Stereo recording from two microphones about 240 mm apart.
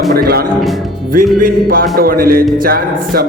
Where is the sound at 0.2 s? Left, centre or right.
Right.